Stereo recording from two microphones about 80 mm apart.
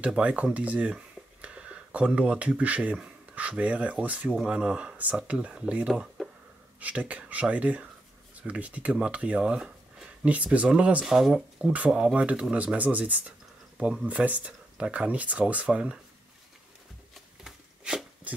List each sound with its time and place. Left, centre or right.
0.0 s speech: centre
11.6 s speech: centre
17.1 s shuffling cards: centre